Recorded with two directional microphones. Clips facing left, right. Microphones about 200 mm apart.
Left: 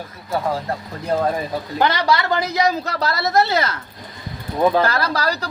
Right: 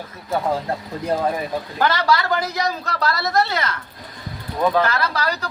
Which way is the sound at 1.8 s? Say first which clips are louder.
Left 1 dB; 20° left (ahead or behind).